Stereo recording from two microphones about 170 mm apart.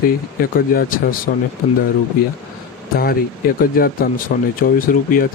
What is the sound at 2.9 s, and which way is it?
Speech, 60° left (ahead or behind).